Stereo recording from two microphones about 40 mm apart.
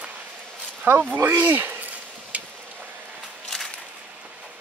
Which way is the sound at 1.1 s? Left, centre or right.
Right.